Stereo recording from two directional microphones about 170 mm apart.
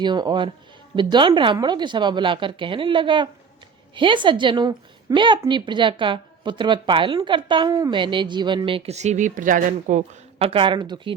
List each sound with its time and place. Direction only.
0.0 s speech: 25° right (ahead or behind)